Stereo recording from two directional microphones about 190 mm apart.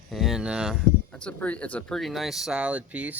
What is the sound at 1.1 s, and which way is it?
Speech, 5° left (ahead or behind).